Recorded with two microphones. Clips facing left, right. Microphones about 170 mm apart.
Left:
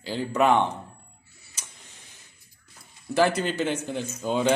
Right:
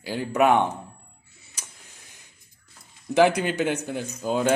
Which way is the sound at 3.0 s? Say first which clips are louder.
Right 3 dB; 20° right (ahead or behind).